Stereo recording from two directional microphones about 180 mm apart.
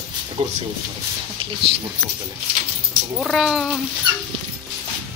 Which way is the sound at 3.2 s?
Centre (ahead or behind).